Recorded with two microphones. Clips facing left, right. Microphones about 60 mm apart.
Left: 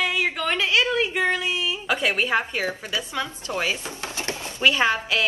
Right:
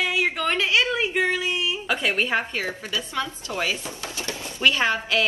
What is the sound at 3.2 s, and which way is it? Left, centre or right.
Speech, left.